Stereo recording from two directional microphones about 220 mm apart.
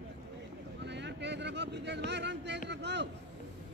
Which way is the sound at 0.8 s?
55° right (ahead or behind).